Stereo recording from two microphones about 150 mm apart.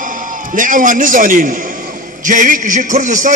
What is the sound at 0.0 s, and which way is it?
A man's voice, 60° right (ahead or behind).